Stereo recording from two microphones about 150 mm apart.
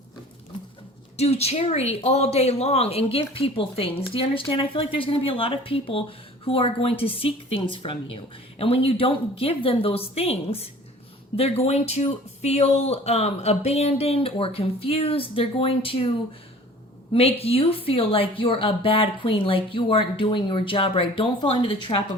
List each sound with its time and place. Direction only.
1.1 s speech: 45° left (ahead or behind)
17.1 s speech: 40° left (ahead or behind)